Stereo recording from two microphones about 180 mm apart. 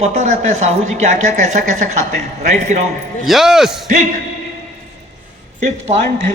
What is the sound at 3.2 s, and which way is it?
Speech, centre (ahead or behind).